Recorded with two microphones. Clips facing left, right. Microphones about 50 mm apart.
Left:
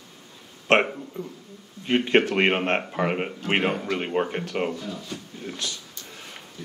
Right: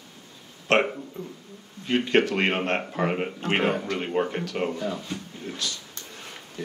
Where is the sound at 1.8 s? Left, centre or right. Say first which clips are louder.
Left 1 dB; left.